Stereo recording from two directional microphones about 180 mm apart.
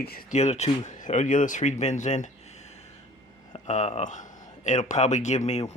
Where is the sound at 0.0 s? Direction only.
60° left (ahead or behind).